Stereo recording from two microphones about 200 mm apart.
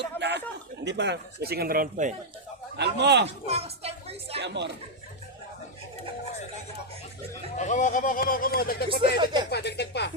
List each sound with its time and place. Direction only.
0.2 s a sound: 60° right (ahead or behind)
0.9 s speech: 60° right (ahead or behind); by 2.1 s 40° right (ahead or behind)
2.7 s speech: 60° right (ahead or behind)
3.4 s a woman's voice: 30° right (ahead or behind)
4.4 s speech: 60° right (ahead or behind)
7.5 s speech: 35° left (ahead or behind)
9.0 s speech: 20° right (ahead or behind)
9.5 s speech: 55° left (ahead or behind)